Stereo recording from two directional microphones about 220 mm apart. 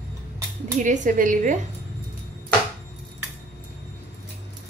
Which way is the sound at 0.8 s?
35° right (ahead or behind).